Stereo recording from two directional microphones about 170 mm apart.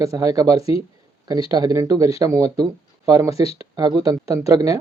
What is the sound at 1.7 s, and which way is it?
Speech, 20° right (ahead or behind).